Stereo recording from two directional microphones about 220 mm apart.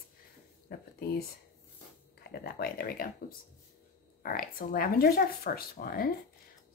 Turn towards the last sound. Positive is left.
turn(degrees=40)  # may be behind; listen again after turning